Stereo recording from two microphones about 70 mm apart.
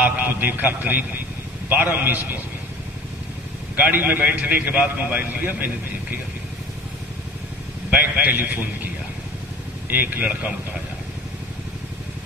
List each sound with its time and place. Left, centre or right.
0.0 s a man's voice: right
3.8 s a man's voice: right
7.9 s a man's voice: right